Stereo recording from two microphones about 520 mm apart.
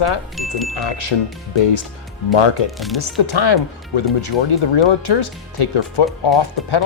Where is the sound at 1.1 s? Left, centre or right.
Left.